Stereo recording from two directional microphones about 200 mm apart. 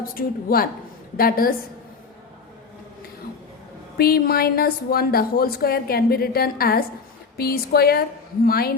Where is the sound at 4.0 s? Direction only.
50° left (ahead or behind).